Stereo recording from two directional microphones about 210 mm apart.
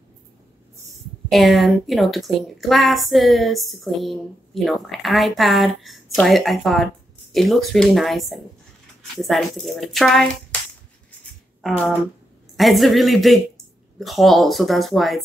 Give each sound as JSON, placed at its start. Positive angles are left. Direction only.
{"t": 1.3, "sound": "a woman's voice", "side_deg": 0}
{"t": 12.5, "sound": "a woman's voice", "side_deg": 0}